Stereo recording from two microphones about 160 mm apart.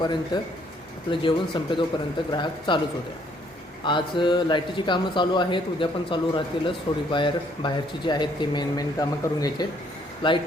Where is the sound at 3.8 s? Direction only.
30° left (ahead or behind).